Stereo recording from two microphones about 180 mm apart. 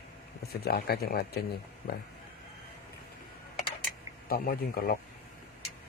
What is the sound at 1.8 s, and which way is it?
Speech, 35° left (ahead or behind).